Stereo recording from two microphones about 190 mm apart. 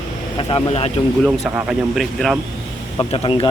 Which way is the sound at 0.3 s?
30° left (ahead or behind).